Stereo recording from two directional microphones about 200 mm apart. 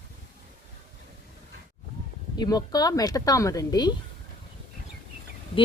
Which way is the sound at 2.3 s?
20° left (ahead or behind).